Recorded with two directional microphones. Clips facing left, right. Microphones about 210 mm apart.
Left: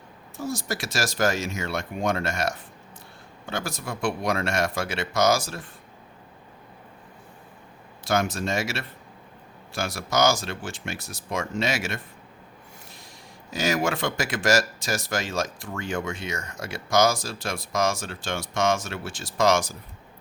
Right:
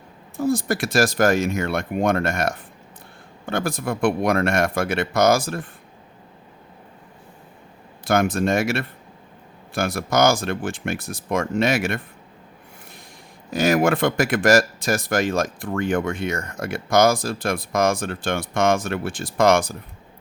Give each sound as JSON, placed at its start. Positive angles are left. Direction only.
{"t": 0.3, "sound": "speech", "side_deg": -55}
{"t": 8.0, "sound": "speech", "side_deg": -55}
{"t": 13.5, "sound": "speech", "side_deg": -55}